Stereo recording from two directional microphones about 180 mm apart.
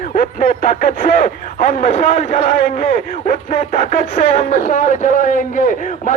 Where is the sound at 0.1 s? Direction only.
50° left (ahead or behind).